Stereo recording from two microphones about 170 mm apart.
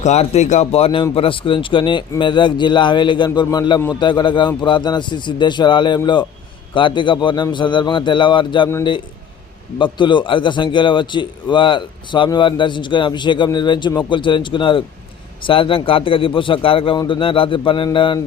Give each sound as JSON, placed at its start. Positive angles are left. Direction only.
{"t": 0.0, "sound": "a man's voice", "side_deg": 40}
{"t": 9.7, "sound": "a man's voice", "side_deg": 30}